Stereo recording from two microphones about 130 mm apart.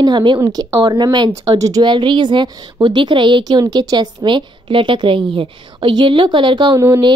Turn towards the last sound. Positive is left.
turn(degrees=-20)  # may be behind; listen again after turning